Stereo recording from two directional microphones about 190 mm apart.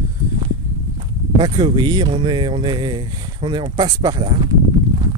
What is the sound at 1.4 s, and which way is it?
Speech, 25° right (ahead or behind).